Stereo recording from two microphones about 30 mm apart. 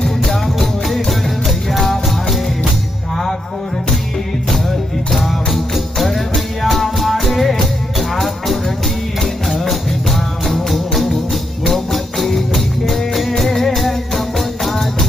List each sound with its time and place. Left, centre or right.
0.0 s music: centre
5.1 s music: centre
10.4 s music: centre